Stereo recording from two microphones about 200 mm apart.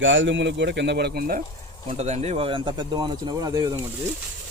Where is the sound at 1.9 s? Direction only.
35° right (ahead or behind); by 3.6 s 20° right (ahead or behind).